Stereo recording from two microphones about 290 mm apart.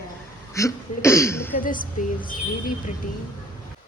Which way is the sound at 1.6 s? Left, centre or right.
Left.